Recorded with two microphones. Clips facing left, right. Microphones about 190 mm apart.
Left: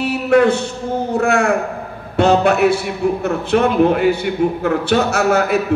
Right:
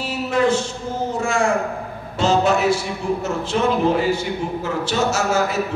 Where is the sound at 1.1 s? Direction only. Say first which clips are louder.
Left 5 dB; 65° left (ahead or behind).